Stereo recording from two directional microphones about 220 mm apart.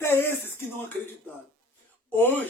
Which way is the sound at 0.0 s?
10° left (ahead or behind).